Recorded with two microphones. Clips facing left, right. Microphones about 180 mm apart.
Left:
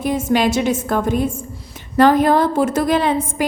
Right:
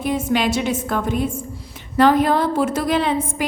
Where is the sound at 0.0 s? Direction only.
40° left (ahead or behind).